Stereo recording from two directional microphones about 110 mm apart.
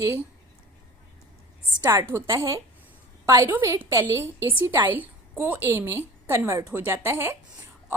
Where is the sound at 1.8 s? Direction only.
30° right (ahead or behind).